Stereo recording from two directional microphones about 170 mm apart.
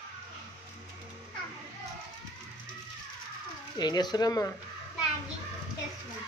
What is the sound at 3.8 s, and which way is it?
Speech, 25° left (ahead or behind).